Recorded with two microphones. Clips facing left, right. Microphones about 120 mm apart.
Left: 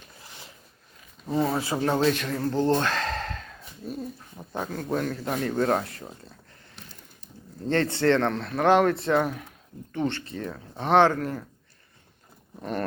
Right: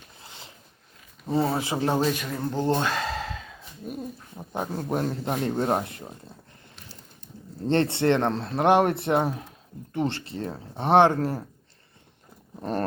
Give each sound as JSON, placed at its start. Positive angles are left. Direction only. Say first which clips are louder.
{"t": 0.2, "sound": "a sound", "louder": "right 1 dB", "side_deg": -25}
{"t": 1.3, "sound": "speech", "louder": "right 1 dB", "side_deg": -30}
{"t": 2.0, "sound": "speech", "louder": "left 2 dB", "side_deg": -10}
{"t": 3.9, "sound": "speech", "louder": "even", "side_deg": -15}
{"t": 7.7, "sound": "speech", "louder": "even", "side_deg": -20}
{"t": 11.2, "sound": "speech", "louder": "right 3 dB", "side_deg": -35}